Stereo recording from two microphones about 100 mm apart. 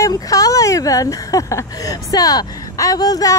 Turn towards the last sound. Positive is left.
turn(degrees=40)  # may be behind; listen again after turning